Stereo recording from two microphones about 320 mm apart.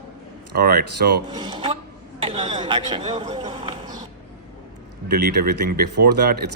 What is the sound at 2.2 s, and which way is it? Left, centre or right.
Speech, centre.